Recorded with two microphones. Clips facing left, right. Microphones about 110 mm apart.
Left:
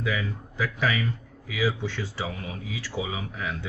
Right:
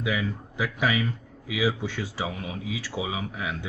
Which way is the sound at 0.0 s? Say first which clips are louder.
Right 1 dB; 15° right (ahead or behind).